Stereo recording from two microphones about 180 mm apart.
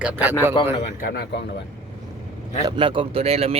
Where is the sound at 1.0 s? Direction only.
60° left (ahead or behind).